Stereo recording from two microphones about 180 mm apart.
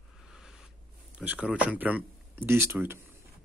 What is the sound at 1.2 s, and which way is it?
Speech, 5° right (ahead or behind).